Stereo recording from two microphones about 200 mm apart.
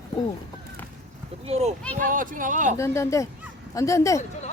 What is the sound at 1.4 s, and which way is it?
Speech, 30° right (ahead or behind).